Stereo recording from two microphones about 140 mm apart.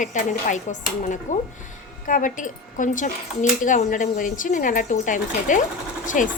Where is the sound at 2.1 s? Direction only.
75° left (ahead or behind).